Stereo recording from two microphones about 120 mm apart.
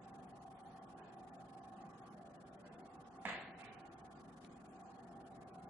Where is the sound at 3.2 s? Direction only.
15° right (ahead or behind).